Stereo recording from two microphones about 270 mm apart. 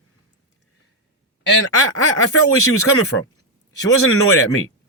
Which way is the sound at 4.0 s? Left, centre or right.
Left.